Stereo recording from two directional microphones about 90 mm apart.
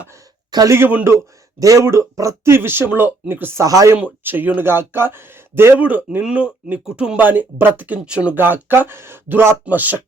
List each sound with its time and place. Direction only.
0.5 s speech: 45° right (ahead or behind)
0.9 s speech: 20° right (ahead or behind)
1.1 s speech: 40° right (ahead or behind); by 3.6 s 25° right (ahead or behind)
3.6 s speech: 40° right (ahead or behind)
3.9 s speech: 20° right (ahead or behind)
8.4 s speech: 25° right (ahead or behind)